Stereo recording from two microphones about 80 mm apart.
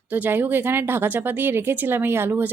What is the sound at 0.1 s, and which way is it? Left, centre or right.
Speech, right.